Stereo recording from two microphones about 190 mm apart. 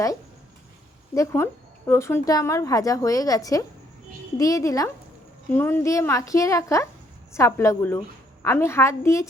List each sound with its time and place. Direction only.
1.1 s a woman's voice: 15° left (ahead or behind)